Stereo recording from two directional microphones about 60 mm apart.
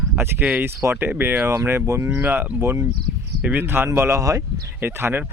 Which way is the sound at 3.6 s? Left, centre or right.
Right.